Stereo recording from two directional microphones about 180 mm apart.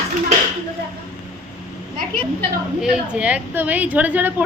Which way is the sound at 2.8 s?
5° right (ahead or behind).